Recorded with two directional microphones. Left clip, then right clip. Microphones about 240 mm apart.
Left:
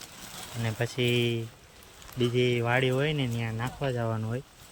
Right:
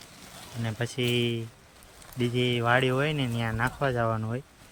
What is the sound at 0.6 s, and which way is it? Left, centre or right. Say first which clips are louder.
Speech: left 1 dB; centre.